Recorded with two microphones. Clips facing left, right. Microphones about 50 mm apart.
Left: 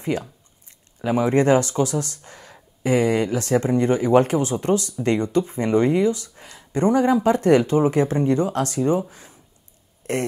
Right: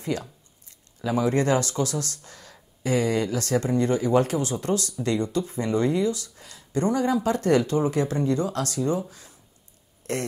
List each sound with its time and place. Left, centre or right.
0.1 s speech: left
9.1 s a sound: left
10.0 s speech: left